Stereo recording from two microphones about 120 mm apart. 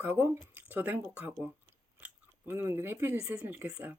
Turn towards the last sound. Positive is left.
turn(degrees=-15)  # may be behind; listen again after turning